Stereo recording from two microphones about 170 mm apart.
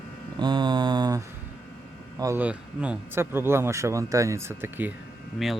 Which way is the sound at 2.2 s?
15° right (ahead or behind).